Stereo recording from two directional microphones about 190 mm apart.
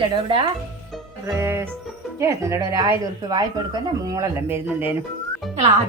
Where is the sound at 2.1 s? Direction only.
15° right (ahead or behind).